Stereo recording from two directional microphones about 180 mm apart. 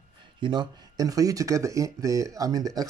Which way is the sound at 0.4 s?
25° right (ahead or behind).